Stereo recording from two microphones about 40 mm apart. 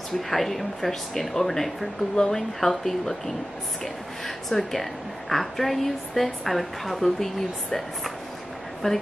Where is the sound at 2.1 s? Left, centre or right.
Centre.